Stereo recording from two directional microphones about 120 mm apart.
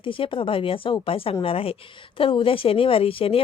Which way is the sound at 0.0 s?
45° left (ahead or behind).